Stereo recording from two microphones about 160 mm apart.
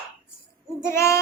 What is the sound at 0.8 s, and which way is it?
Hoot, 15° left (ahead or behind).